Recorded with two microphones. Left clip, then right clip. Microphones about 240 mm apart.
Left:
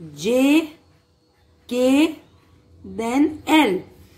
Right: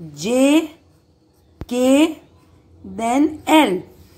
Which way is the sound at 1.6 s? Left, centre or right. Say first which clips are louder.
Right 2 dB; centre.